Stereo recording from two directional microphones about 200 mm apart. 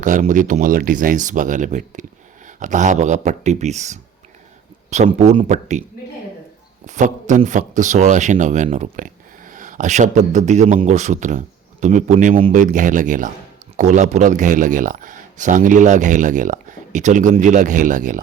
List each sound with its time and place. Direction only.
0.0 s a man's voice: 40° right (ahead or behind)
6.8 s a man's voice: 35° right (ahead or behind)